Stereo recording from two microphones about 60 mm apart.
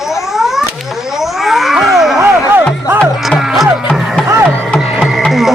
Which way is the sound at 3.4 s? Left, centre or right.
Centre.